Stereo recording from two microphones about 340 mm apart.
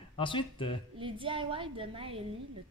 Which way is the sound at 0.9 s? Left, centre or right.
Centre.